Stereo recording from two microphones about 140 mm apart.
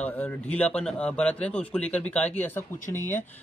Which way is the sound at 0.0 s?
15° left (ahead or behind).